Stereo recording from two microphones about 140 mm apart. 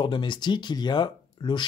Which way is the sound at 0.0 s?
35° left (ahead or behind).